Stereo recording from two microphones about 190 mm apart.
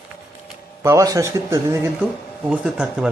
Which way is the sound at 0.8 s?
15° right (ahead or behind).